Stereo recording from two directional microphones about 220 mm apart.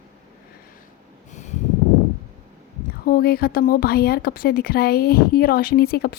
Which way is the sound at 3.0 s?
45° left (ahead or behind).